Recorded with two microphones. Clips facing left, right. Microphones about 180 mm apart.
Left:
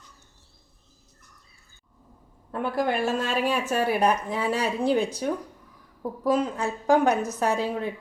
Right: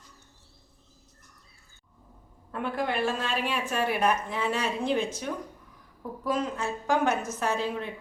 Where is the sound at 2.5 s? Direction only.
40° left (ahead or behind).